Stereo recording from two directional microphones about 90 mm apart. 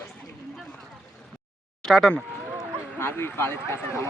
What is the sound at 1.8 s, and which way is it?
Speech, 5° left (ahead or behind).